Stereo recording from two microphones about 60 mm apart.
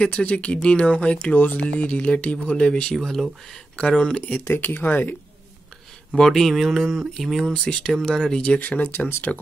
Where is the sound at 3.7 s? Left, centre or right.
Centre.